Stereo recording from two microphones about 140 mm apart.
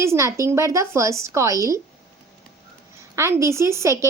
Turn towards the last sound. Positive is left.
turn(degrees=-20)  # may be behind; listen again after turning